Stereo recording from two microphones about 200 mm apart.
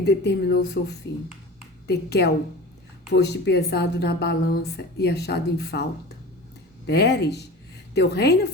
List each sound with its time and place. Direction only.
0.0 s a woman's voice: 55° left (ahead or behind)
6.8 s a woman's voice: 55° left (ahead or behind)